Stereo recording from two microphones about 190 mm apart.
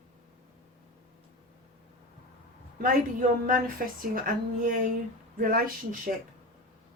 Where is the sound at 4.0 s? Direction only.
45° right (ahead or behind).